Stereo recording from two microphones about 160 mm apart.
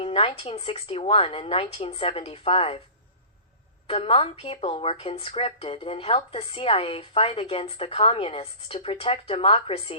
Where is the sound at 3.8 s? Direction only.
35° left (ahead or behind).